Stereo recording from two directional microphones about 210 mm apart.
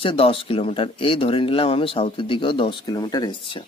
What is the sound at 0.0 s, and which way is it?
Speech, 25° left (ahead or behind).